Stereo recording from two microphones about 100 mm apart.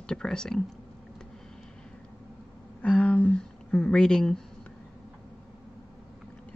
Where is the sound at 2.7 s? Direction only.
10° left (ahead or behind).